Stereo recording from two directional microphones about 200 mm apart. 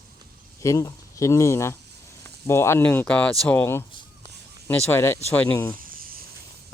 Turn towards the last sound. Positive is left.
turn(degrees=-45)  # may be behind; listen again after turning